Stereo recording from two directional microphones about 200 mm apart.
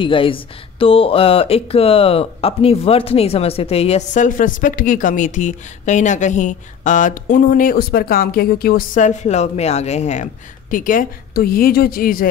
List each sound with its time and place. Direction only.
0.0 s speech: 25° left (ahead or behind); by 12.3 s 45° left (ahead or behind)